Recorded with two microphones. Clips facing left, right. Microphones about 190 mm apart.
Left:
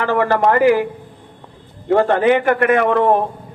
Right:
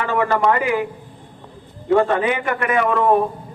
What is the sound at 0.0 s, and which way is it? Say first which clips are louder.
Speech: left 3 dB; 55° left (ahead or behind).